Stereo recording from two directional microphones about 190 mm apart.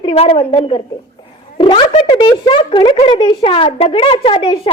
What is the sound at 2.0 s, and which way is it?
A woman's voice, 25° left (ahead or behind).